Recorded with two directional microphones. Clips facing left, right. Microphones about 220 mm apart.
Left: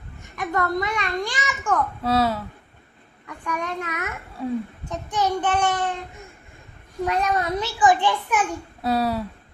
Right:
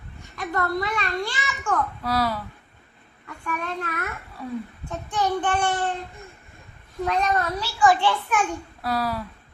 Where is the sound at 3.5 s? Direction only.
15° left (ahead or behind).